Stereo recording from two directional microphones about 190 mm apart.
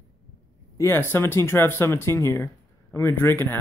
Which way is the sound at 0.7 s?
15° left (ahead or behind).